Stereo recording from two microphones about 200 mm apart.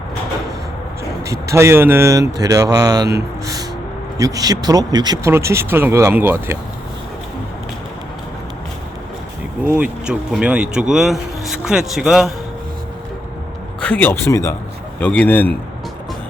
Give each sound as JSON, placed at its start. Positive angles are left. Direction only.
{"t": 1.2, "sound": "speech", "side_deg": -15}
{"t": 3.4, "sound": "music", "side_deg": -15}
{"t": 4.2, "sound": "speech", "side_deg": -15}
{"t": 9.6, "sound": "speech", "side_deg": -5}
{"t": 13.8, "sound": "speech", "side_deg": 10}